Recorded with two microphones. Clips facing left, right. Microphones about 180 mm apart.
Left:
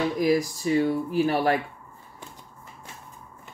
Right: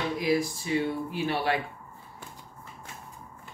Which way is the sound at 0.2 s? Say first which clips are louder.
Left 3 dB; 40° left (ahead or behind).